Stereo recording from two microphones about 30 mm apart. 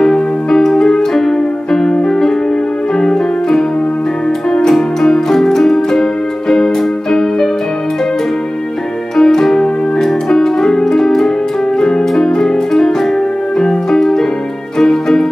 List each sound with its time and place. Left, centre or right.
0.0 s music: centre
1.1 s music: centre
4.6 s music: centre
6.5 s keyboard: centre
9.1 s music: centre
13.6 s keyboard: centre
14.8 s music: centre